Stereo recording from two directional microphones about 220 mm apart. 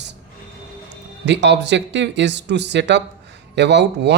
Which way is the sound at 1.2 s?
50° right (ahead or behind).